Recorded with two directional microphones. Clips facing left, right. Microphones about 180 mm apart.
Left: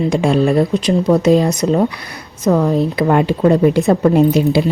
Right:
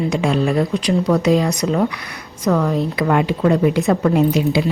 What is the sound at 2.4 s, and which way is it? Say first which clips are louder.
Speech: left 3 dB; 20° left (ahead or behind).